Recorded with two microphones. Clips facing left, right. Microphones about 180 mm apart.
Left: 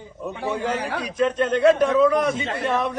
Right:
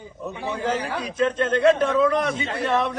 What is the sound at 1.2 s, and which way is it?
A man's voice, 10° left (ahead or behind).